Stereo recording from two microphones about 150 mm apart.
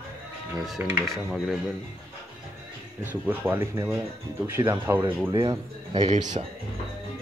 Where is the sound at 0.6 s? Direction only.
Centre (ahead or behind).